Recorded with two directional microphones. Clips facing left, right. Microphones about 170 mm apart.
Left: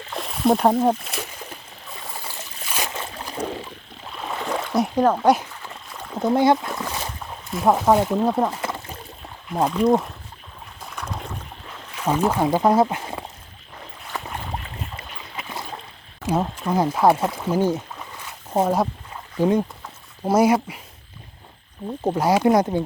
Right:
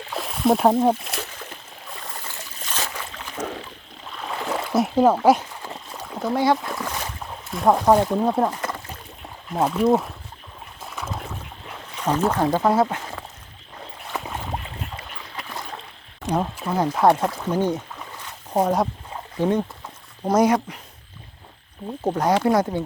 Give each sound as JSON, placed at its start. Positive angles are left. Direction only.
{"t": 0.1, "sound": "a sound", "side_deg": 0}
{"t": 2.9, "sound": "boat", "side_deg": 30}
{"t": 4.4, "sound": "splash", "side_deg": 0}
{"t": 6.2, "sound": "speech", "side_deg": 20}
{"t": 6.7, "sound": "boat", "side_deg": 5}
{"t": 7.5, "sound": "speech", "side_deg": 0}
{"t": 10.8, "sound": "rowboat", "side_deg": -5}
{"t": 12.0, "sound": "speech", "side_deg": 10}
{"t": 14.1, "sound": "boat", "side_deg": 0}
{"t": 16.2, "sound": "speech", "side_deg": 5}
{"t": 22.0, "sound": "speech", "side_deg": 10}